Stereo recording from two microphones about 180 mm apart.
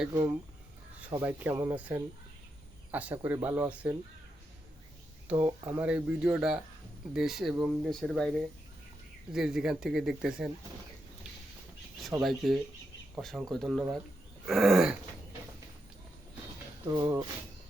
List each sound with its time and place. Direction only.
1.0 s speech: 10° right (ahead or behind)
5.3 s speech: 10° right (ahead or behind)
12.2 s speech: centre (ahead or behind)
16.9 s speech: 20° right (ahead or behind)